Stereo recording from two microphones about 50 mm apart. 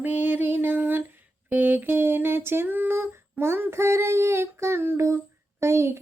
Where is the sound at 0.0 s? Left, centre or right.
Right.